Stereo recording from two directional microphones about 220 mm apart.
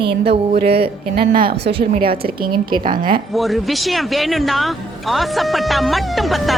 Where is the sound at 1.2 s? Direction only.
45° right (ahead or behind).